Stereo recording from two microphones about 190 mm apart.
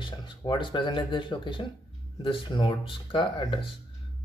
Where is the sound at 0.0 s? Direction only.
25° left (ahead or behind).